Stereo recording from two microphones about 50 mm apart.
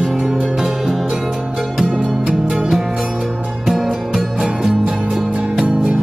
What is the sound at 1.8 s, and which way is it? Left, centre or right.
Music, right.